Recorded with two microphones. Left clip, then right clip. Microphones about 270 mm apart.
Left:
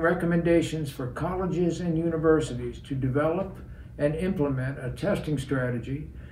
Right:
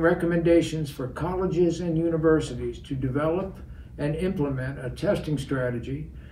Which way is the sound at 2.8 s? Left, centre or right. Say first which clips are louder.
Left 1 dB; centre.